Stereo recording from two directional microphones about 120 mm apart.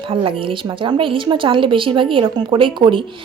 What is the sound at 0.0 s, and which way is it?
A woman's voice, 45° right (ahead or behind).